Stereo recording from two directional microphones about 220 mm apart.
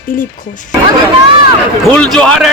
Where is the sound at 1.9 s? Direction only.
5° left (ahead or behind).